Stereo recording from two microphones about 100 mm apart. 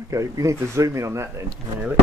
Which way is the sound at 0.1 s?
35° right (ahead or behind).